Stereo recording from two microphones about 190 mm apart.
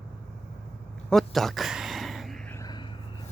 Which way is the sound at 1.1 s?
Centre (ahead or behind).